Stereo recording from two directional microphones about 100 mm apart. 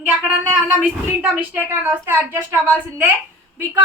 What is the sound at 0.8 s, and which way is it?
Speech, 15° right (ahead or behind).